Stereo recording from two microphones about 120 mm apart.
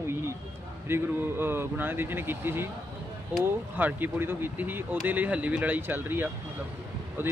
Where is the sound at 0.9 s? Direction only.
20° right (ahead or behind).